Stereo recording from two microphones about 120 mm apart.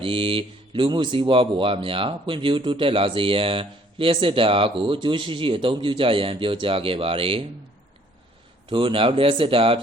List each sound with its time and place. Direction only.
0.0 s speech: 50° right (ahead or behind)
8.7 s speech: 45° right (ahead or behind)